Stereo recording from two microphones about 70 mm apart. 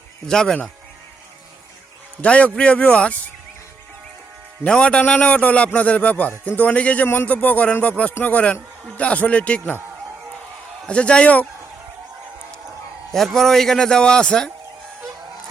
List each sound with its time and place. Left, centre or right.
0.3 s a man's voice: centre
2.2 s a man's voice: centre
4.6 s a man's voice: centre
7.1 s a man's voice: left
10.8 s a man's voice: centre
13.1 s a man's voice: centre